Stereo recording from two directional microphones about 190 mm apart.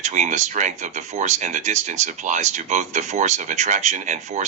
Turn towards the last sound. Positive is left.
turn(degrees=-35)  # may be behind; listen again after turning